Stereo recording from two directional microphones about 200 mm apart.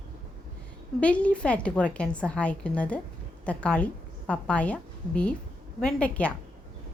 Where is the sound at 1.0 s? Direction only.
5° left (ahead or behind).